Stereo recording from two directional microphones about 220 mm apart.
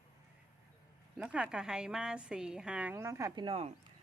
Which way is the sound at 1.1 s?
5° right (ahead or behind).